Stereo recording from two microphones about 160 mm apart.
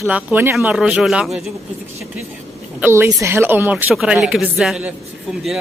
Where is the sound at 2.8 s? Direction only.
15° right (ahead or behind).